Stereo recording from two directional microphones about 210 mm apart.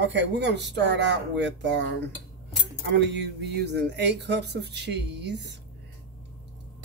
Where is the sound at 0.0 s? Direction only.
55° right (ahead or behind).